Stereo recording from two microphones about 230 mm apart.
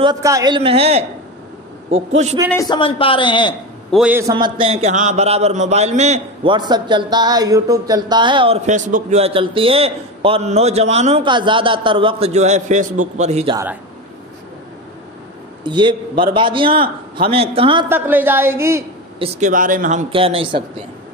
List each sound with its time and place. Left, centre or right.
0.0 s a man's voice: centre
2.5 s a man's voice: left
3.9 s a man's voice: centre; by 13.6 s right
15.6 s a man's voice: centre
17.8 s a woman's voice: centre
19.1 s a man's voice: right